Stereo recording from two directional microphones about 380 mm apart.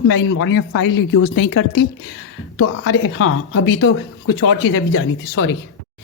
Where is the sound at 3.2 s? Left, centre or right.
Left.